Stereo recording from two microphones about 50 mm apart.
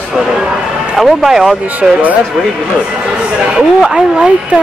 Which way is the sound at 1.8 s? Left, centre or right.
Centre.